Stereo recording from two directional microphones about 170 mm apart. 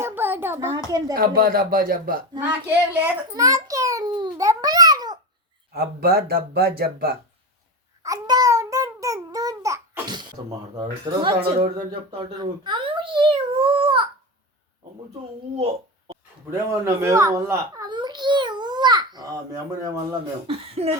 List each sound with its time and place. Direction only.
0.0 s a sound: 10° right (ahead or behind)
0.9 s speech: 20° right (ahead or behind)
1.1 s speech: 60° right (ahead or behind)
2.6 s a child's voice: 15° right (ahead or behind)
5.7 s speech: 65° right (ahead or behind)
8.0 s babbling: 20° right (ahead or behind)
10.8 s speech: 30° right (ahead or behind)
12.4 s a sound: 30° right (ahead or behind)
15.5 s a sound: 35° right (ahead or behind)
16.5 s babbling: 15° right (ahead or behind)
19.8 s speech: 20° right (ahead or behind)
20.5 s speech: 35° right (ahead or behind)